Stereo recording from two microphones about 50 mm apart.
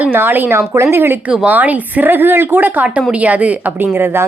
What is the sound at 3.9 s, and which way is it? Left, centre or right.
Speech, right.